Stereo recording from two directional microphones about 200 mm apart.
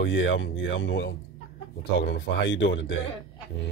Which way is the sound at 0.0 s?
65° left (ahead or behind).